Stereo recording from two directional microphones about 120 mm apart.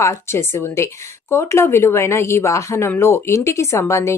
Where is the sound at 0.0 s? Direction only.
20° left (ahead or behind).